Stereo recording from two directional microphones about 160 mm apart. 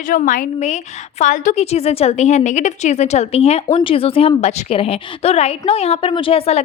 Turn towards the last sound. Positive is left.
turn(degrees=40)  # may be behind; listen again after turning